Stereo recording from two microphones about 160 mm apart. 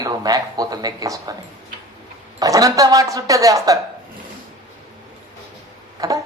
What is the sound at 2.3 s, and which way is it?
A man's voice, 20° right (ahead or behind).